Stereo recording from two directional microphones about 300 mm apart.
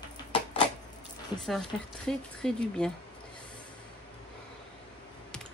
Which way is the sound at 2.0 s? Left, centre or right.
Centre.